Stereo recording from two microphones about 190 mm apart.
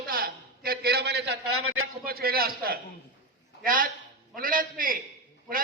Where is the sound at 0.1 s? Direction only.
50° right (ahead or behind).